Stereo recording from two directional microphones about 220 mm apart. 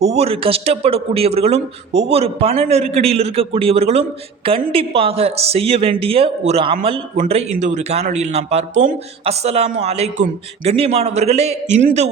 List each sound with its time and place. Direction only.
0.0 s a woman's voice: 30° right (ahead or behind)